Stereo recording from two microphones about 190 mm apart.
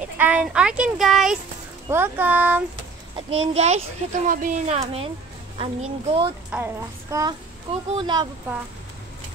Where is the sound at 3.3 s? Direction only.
35° right (ahead or behind).